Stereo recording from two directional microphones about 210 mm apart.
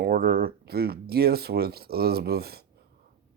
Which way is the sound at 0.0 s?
45° right (ahead or behind).